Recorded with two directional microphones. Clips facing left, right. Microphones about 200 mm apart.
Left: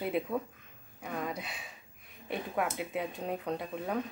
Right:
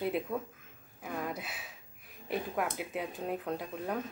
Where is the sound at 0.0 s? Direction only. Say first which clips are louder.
Left 1 dB; centre (ahead or behind).